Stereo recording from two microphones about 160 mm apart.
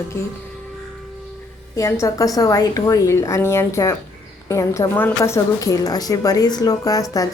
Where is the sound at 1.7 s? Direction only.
20° left (ahead or behind).